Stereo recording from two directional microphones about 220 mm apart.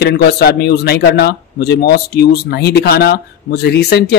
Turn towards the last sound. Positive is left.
turn(degrees=45)  # may be behind; listen again after turning